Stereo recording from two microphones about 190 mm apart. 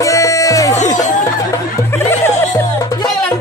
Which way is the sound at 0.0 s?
15° left (ahead or behind).